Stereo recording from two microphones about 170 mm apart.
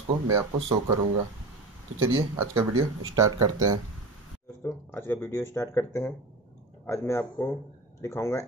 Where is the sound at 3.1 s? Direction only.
20° right (ahead or behind).